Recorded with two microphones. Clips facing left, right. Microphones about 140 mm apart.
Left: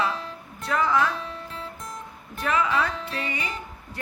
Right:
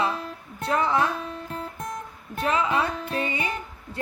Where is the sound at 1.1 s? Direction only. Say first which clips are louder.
Right 2 dB; 45° right (ahead or behind).